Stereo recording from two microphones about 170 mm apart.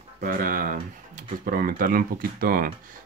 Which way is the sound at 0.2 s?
55° right (ahead or behind).